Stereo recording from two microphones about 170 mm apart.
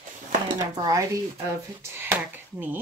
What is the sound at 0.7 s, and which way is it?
Speech, 20° right (ahead or behind).